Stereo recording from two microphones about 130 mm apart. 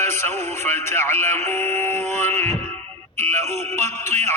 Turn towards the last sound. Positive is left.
turn(degrees=20)  # may be behind; listen again after turning